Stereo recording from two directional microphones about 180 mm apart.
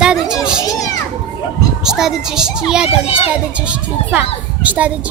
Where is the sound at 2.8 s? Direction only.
35° left (ahead or behind).